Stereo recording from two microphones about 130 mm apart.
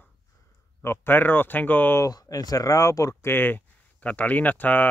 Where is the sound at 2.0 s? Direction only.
30° left (ahead or behind).